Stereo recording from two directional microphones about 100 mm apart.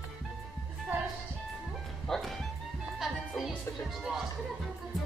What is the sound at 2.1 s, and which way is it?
Music, centre (ahead or behind).